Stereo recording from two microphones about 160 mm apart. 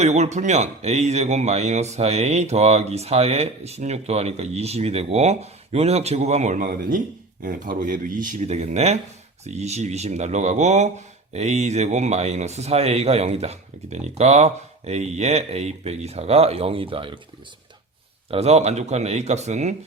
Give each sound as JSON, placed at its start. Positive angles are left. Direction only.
{"t": 0.0, "sound": "speech", "side_deg": -45}
{"t": 18.3, "sound": "speech", "side_deg": -40}